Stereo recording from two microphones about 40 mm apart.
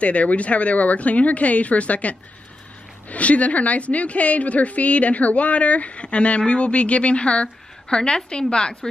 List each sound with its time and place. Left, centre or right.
0.0 s a woman's voice: left